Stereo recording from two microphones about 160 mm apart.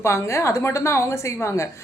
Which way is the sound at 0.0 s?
15° left (ahead or behind).